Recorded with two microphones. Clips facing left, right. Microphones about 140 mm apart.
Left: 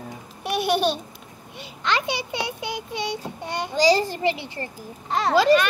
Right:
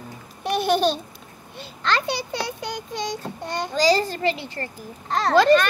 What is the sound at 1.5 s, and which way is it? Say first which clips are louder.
A child's voice: right 1 dB; 35° right (ahead or behind).